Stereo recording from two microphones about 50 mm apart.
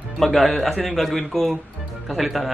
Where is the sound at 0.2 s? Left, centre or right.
Centre.